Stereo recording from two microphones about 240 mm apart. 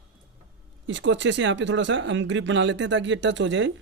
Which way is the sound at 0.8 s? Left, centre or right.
Right.